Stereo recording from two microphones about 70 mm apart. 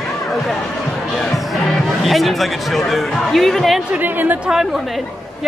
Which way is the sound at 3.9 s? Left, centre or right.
Right.